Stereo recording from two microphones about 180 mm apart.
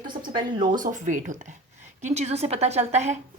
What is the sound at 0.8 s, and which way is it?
A woman's voice, 45° right (ahead or behind).